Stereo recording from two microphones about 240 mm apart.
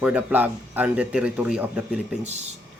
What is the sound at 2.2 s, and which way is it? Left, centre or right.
Speech, right.